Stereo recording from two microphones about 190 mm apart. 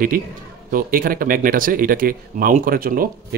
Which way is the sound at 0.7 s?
50° right (ahead or behind).